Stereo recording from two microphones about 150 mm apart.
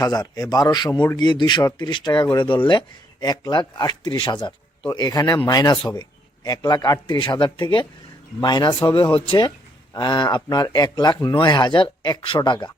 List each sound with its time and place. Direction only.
0.0 s speech: 25° left (ahead or behind)